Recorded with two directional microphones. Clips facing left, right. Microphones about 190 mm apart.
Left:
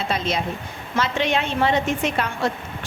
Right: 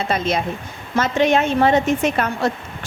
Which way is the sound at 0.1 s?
50° right (ahead or behind).